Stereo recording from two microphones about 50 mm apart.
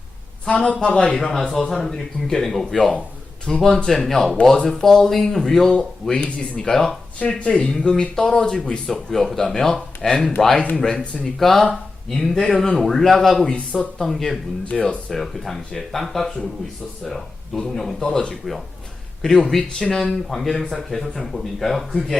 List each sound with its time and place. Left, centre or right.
0.4 s speech: left
4.0 s speech: centre
8.9 s speech: centre; by 11.3 s left
11.3 s speech: centre
14.6 s speech: left
15.1 s speech: centre